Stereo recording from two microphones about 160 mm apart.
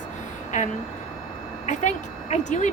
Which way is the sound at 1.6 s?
45° left (ahead or behind).